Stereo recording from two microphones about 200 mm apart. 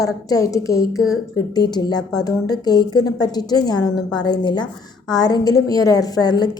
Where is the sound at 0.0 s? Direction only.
15° left (ahead or behind).